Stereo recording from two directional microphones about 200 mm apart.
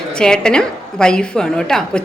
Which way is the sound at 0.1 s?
5° left (ahead or behind).